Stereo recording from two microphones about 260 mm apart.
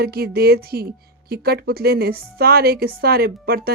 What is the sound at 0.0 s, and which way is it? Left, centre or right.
Speech, right.